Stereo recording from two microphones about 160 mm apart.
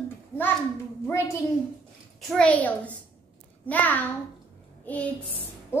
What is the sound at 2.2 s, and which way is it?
A woman's voice, 5° left (ahead or behind).